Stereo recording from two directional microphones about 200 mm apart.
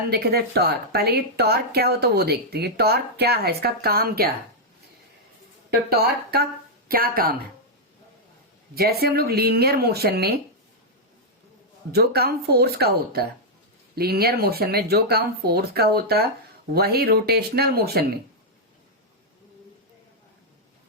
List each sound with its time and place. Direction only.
0.1 s speech: 55° right (ahead or behind)
5.9 s speech: 50° right (ahead or behind)
8.7 s speech: 50° right (ahead or behind)
11.9 s speech: 50° right (ahead or behind)